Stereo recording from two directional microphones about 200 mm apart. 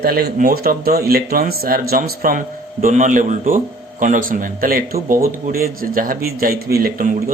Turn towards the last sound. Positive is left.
turn(degrees=-45)  # may be behind; listen again after turning